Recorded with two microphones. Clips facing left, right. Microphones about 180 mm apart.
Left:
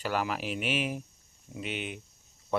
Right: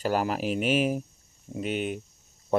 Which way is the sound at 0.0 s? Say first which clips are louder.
Right 5 dB; 40° right (ahead or behind).